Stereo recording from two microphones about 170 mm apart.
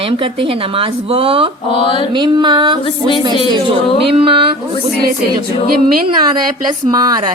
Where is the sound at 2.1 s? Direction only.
25° right (ahead or behind).